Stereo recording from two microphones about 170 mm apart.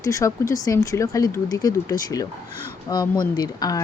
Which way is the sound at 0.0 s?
20° left (ahead or behind).